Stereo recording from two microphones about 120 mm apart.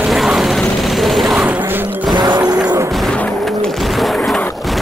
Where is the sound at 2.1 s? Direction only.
40° right (ahead or behind).